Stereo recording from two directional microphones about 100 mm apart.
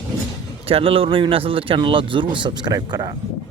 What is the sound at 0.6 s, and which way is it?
Speech, 70° right (ahead or behind).